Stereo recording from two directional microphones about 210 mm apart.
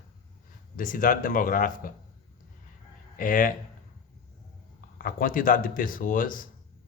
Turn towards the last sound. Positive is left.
turn(degrees=40)  # may be behind; listen again after turning